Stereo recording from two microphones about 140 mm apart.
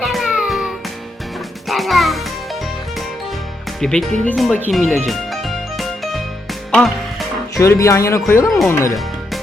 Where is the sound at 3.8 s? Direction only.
5° left (ahead or behind).